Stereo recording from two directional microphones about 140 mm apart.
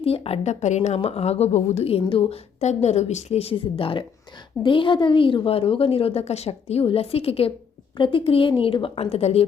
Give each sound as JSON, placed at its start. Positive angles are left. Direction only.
{"t": 0.0, "sound": "a woman's voice", "side_deg": 45}
{"t": 0.9, "sound": "a woman's voice", "side_deg": 45}
{"t": 2.6, "sound": "a woman's voice", "side_deg": 55}